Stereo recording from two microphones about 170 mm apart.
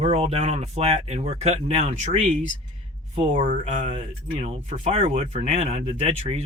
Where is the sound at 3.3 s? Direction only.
30° right (ahead or behind).